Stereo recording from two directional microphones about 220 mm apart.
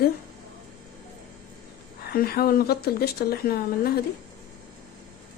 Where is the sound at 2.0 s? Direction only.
45° left (ahead or behind).